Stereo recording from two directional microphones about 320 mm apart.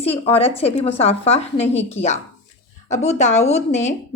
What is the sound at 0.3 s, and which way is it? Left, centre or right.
A woman's voice, centre.